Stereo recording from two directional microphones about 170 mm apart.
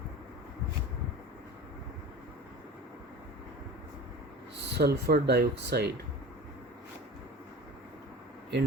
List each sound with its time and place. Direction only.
4.5 s speech: 70° right (ahead or behind)